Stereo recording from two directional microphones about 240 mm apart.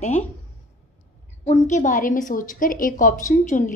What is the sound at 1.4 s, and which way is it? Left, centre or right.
A woman's voice, left.